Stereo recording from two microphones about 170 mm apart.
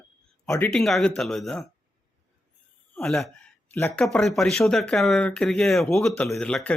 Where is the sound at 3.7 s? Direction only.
15° left (ahead or behind).